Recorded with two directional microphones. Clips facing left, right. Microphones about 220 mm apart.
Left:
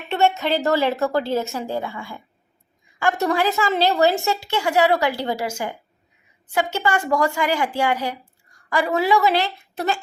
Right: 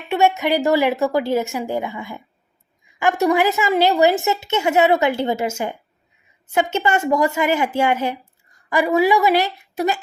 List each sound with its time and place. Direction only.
0.1 s a woman's voice: 15° right (ahead or behind)